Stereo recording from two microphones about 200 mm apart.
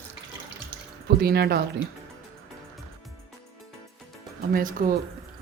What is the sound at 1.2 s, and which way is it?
Speech, 50° right (ahead or behind).